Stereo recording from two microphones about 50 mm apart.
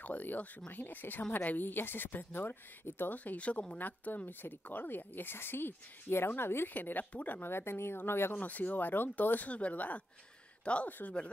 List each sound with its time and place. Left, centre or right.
0.0 s speech: left
3.3 s speech: left
6.7 s speech: left
7.5 s speech: left
8.4 s speech: left
9.5 s speech: left